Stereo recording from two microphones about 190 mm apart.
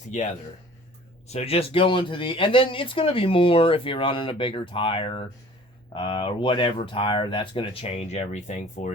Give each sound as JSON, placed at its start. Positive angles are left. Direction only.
{"t": 0.1, "sound": "speech", "side_deg": 40}
{"t": 1.3, "sound": "speech", "side_deg": 35}